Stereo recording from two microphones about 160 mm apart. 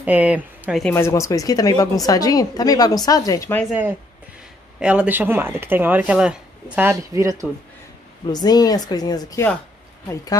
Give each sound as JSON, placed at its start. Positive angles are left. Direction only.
{"t": 0.0, "sound": "speech", "side_deg": -10}
{"t": 0.9, "sound": "a woman's voice", "side_deg": 15}
{"t": 4.7, "sound": "speech", "side_deg": -5}
{"t": 8.3, "sound": "a woman's voice", "side_deg": 25}